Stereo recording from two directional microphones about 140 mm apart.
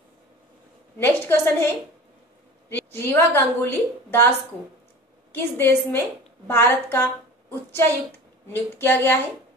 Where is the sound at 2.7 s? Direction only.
15° left (ahead or behind).